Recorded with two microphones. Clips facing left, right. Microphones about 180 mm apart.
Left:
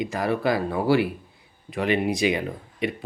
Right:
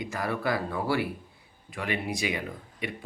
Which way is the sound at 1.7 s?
20° left (ahead or behind).